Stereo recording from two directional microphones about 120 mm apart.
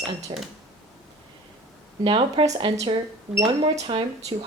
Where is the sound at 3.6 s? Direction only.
45° right (ahead or behind).